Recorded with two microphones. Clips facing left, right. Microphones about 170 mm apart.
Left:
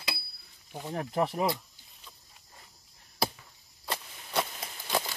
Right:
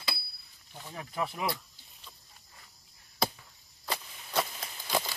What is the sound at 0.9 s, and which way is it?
Speech, 40° left (ahead or behind).